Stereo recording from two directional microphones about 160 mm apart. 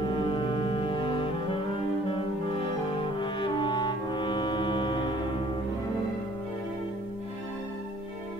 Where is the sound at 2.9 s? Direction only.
30° left (ahead or behind).